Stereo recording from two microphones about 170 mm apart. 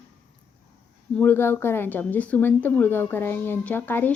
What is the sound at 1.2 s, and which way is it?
Speech, 10° left (ahead or behind).